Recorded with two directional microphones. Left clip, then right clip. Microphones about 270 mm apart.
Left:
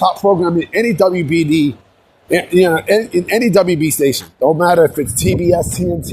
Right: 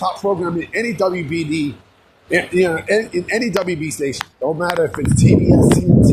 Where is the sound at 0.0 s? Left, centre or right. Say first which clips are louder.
Left 7 dB; left.